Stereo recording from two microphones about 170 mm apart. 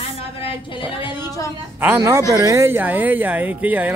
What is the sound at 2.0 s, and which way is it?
Speech, 20° right (ahead or behind).